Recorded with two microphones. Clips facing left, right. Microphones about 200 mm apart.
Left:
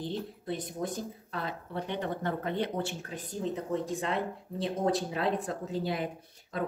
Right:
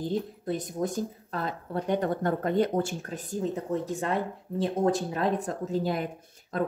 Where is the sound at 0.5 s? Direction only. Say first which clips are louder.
Right 4 dB; 45° right (ahead or behind).